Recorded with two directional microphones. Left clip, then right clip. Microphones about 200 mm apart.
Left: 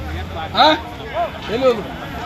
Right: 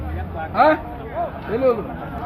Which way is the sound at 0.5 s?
Centre (ahead or behind).